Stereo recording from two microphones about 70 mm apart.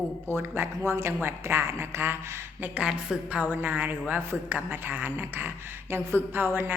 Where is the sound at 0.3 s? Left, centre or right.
Right.